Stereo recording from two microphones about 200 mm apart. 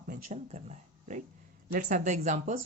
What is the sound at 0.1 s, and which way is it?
Speech, 35° right (ahead or behind).